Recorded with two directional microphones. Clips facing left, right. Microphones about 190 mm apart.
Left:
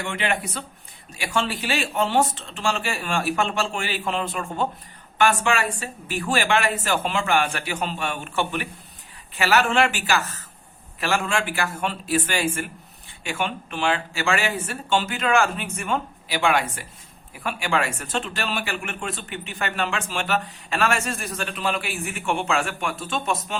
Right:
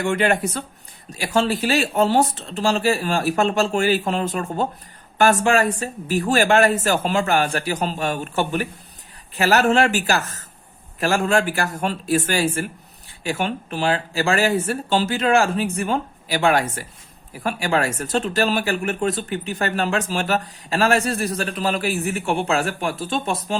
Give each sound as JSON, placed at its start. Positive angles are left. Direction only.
{"t": 0.0, "sound": "speech", "side_deg": -45}